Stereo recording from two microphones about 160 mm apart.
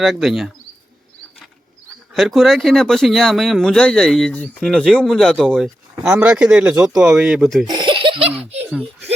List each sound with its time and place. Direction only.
0.0 s speech: centre (ahead or behind)
2.1 s speech: centre (ahead or behind)
7.7 s laughter: 30° right (ahead or behind)